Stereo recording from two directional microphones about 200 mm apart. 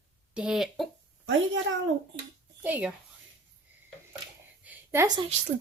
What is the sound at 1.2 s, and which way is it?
Speech, 70° right (ahead or behind).